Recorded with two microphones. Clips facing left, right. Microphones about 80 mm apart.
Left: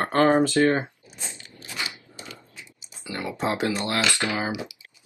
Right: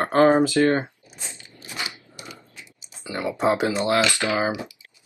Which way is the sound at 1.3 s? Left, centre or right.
Right.